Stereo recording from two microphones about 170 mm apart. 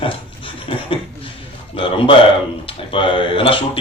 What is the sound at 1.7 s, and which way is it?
A man's voice, 30° left (ahead or behind).